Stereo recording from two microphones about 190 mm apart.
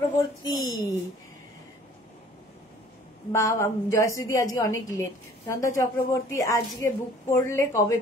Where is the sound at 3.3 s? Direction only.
15° left (ahead or behind).